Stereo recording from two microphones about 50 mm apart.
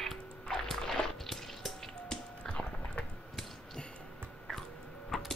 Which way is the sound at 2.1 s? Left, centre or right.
Centre.